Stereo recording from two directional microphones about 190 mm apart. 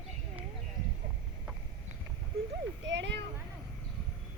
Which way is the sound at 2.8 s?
65° right (ahead or behind).